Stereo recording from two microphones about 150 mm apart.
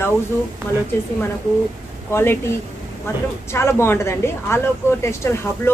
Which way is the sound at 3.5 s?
15° left (ahead or behind).